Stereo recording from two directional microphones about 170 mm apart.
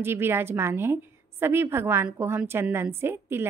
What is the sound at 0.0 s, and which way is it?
A woman's voice, 15° right (ahead or behind).